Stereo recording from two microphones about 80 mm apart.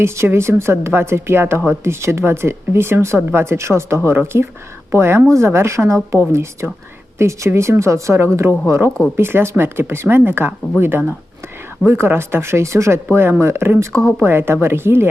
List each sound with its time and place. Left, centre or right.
0.0 s a woman's voice: right